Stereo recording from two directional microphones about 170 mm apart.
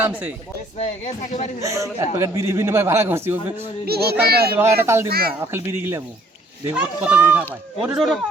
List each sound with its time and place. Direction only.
0.0 s a man's voice: 10° right (ahead or behind)
0.8 s speech: 45° left (ahead or behind)
1.6 s a man's voice: 20° right (ahead or behind)
3.8 s a child's voice: 70° right (ahead or behind)
4.5 s a man's voice: 15° right (ahead or behind)
5.0 s speech: 65° right (ahead or behind)
5.5 s a man's voice: 15° right (ahead or behind)